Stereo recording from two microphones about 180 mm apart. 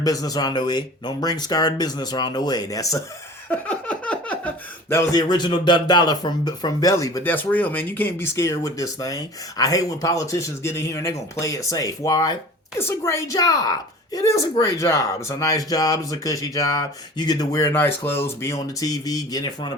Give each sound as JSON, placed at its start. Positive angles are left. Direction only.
{"t": 0.0, "sound": "a woman's voice", "side_deg": 20}
{"t": 3.5, "sound": "a woman's voice", "side_deg": 5}